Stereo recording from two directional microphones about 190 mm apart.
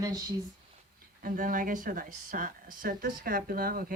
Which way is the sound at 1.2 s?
45° right (ahead or behind).